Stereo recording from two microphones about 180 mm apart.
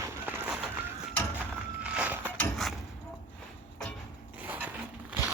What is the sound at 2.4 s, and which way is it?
Mechanisms, centre (ahead or behind).